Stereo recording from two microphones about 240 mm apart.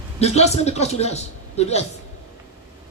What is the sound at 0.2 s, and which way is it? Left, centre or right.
Speech, left.